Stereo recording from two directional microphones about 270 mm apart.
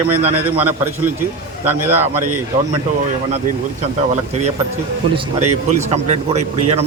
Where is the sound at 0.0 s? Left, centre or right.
Right.